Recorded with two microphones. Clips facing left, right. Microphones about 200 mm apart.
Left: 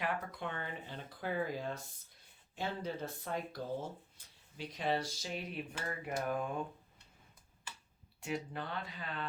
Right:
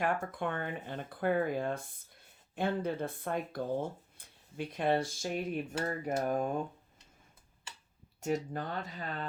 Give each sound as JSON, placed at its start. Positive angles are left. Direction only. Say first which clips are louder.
{"t": 0.0, "sound": "speech", "louder": "right 6 dB", "side_deg": -50}
{"t": 8.2, "sound": "speech", "louder": "right 6 dB", "side_deg": -45}